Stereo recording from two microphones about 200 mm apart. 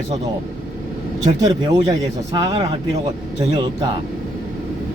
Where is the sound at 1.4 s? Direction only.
20° right (ahead or behind).